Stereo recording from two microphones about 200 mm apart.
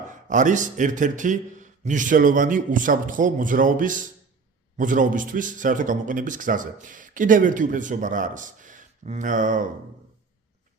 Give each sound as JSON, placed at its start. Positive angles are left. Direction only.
{"t": 0.1, "sound": "speech", "side_deg": -40}